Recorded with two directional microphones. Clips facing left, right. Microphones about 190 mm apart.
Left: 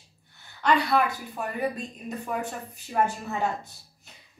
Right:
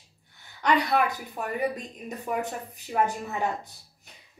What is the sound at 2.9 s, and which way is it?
Speech, 15° right (ahead or behind).